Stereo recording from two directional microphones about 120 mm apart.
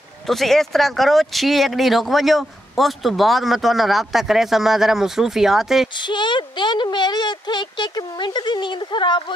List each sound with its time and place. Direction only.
0.3 s speech: centre (ahead or behind)
5.9 s speech: 40° left (ahead or behind)